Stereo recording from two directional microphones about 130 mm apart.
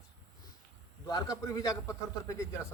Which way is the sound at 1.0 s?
30° left (ahead or behind).